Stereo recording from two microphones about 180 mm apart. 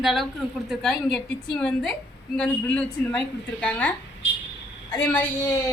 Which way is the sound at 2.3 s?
5° left (ahead or behind).